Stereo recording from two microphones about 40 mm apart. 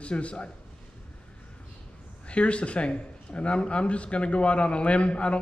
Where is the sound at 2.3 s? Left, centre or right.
Left.